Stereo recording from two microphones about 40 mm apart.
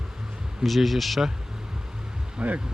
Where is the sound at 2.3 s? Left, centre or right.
Right.